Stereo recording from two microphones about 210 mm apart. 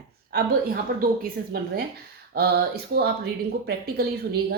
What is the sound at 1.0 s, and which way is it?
A woman's voice, 45° right (ahead or behind).